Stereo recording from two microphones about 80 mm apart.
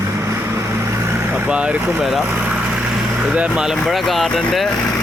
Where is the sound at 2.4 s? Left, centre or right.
Centre.